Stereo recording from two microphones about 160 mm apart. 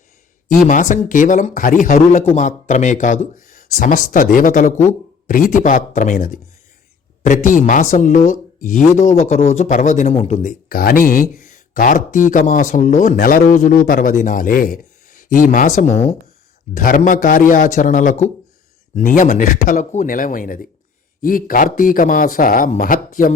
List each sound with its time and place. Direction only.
0.7 s a man's voice: 55° left (ahead or behind)
10.7 s a man's voice: 65° left (ahead or behind)
13.1 s a man's voice: 65° left (ahead or behind)
13.4 s a man's voice: 50° left (ahead or behind)
16.7 s a man's voice: 60° left (ahead or behind)